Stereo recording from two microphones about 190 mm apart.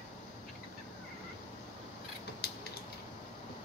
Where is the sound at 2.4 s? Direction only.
55° left (ahead or behind).